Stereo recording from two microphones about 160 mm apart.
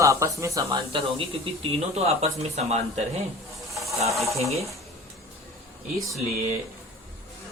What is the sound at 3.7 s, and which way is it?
Snake, centre (ahead or behind).